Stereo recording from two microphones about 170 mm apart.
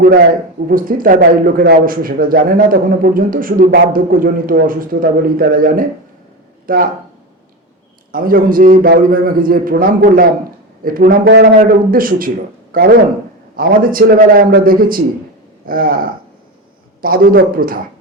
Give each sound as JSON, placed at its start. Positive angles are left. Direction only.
{"t": 0.0, "sound": "speech", "side_deg": -65}
{"t": 0.7, "sound": "speech", "side_deg": -55}
{"t": 8.1, "sound": "speech", "side_deg": -55}